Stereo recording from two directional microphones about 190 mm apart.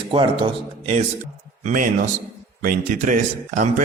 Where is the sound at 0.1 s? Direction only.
25° right (ahead or behind).